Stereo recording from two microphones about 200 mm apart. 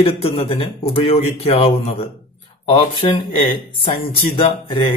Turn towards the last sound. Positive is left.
turn(degrees=25)  # may be behind; listen again after turning